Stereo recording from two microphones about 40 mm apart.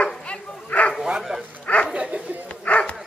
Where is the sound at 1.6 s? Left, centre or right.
Left.